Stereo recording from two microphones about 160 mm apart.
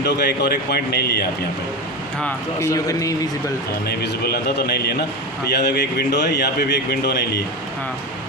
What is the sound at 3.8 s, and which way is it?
A man's voice, 80° left.